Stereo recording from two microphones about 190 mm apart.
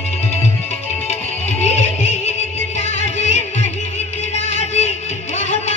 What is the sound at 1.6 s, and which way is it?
Music, 35° left (ahead or behind).